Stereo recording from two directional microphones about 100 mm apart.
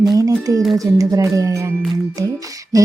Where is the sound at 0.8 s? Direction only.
35° right (ahead or behind).